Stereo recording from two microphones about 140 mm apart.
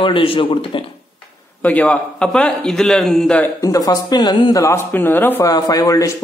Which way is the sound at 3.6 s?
25° left (ahead or behind).